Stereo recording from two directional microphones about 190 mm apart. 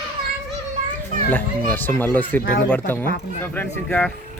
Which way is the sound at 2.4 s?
50° left (ahead or behind).